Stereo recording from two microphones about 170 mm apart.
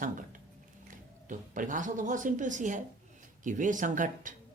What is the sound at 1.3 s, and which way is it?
Speech, 50° right (ahead or behind).